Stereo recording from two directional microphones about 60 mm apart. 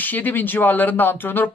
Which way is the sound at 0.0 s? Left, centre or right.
Left.